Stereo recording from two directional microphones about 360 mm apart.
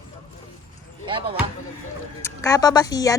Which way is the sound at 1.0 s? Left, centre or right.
Centre.